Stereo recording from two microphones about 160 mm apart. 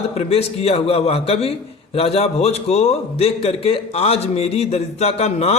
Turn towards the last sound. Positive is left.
turn(degrees=40)  # may be behind; listen again after turning